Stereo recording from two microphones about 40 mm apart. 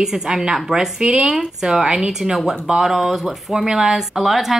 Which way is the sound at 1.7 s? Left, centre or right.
Centre.